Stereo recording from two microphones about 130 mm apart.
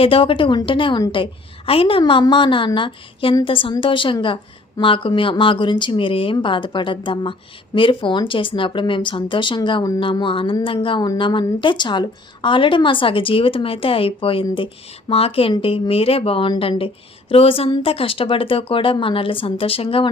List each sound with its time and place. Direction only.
0.0 s a woman's voice: 45° left (ahead or behind)